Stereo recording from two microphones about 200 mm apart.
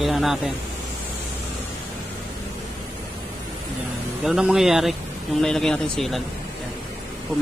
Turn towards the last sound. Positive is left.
turn(degrees=0)  # may be behind; listen again after turning